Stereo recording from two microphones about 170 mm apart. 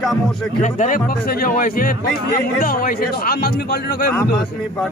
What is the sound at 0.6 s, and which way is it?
A man's voice, 50° left (ahead or behind).